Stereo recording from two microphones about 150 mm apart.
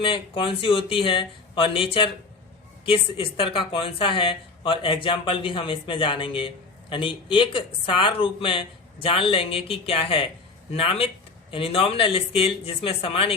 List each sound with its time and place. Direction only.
0.0 s a woman's voice: 35° left (ahead or behind)